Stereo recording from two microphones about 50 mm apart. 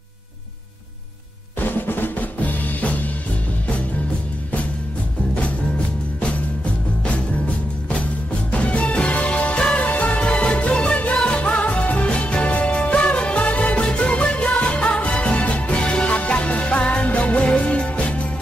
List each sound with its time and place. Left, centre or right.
1.6 s drum roll: left
6.2 s music: left